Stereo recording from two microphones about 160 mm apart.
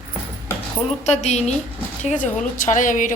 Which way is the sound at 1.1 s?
45° left (ahead or behind).